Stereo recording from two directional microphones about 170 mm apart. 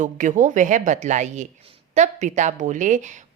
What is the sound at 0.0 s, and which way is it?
A woman's voice, 50° right (ahead or behind).